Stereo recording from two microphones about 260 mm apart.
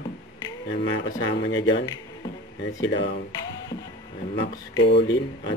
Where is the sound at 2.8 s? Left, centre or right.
Left.